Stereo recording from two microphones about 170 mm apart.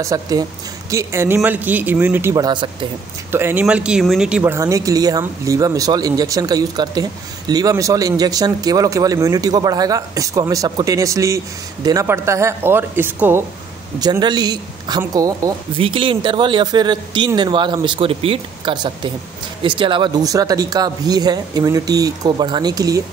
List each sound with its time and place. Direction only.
0.0 s speech: 20° right (ahead or behind)
3.3 s speech: 15° right (ahead or behind)
15.7 s speech: 30° right (ahead or behind)